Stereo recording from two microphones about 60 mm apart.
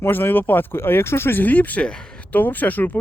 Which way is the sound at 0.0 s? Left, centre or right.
Left.